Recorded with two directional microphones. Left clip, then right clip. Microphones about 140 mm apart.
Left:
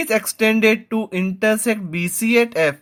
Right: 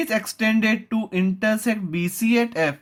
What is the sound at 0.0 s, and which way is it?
Speech, 30° left (ahead or behind).